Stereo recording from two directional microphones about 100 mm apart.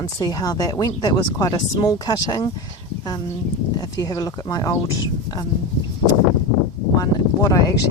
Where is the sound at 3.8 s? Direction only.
40° left (ahead or behind).